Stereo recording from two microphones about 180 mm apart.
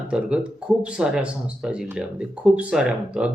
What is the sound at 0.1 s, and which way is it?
Speech, 5° right (ahead or behind).